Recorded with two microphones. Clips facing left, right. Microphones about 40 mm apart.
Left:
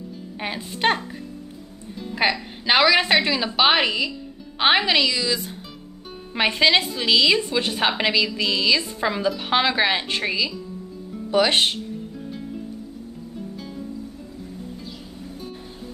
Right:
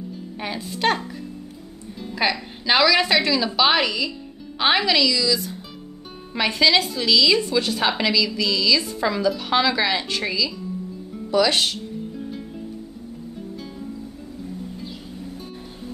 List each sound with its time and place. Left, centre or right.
0.4 s a woman's voice: left